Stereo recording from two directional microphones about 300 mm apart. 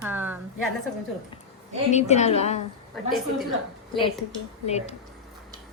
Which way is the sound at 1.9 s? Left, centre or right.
Left.